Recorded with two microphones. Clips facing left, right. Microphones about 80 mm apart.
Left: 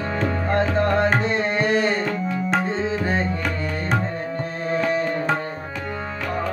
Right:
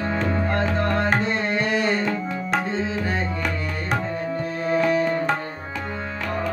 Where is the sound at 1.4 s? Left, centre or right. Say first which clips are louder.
Left 2 dB; left.